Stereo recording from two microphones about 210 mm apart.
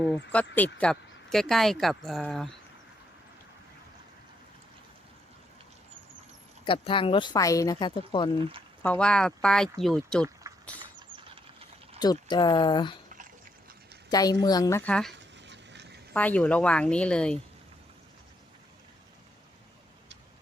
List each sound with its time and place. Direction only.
0.0 s speech: 5° left (ahead or behind)
6.7 s speech: 25° left (ahead or behind)
8.8 s speech: 5° left (ahead or behind)
10.5 s a sound: 15° right (ahead or behind)
11.9 s speech: 20° left (ahead or behind)
14.1 s a woman's voice: 20° left (ahead or behind)
15.1 s dog: 55° right (ahead or behind)
16.1 s speech: 5° left (ahead or behind)